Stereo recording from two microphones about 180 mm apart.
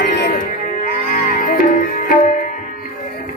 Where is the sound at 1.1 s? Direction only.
50° left (ahead or behind).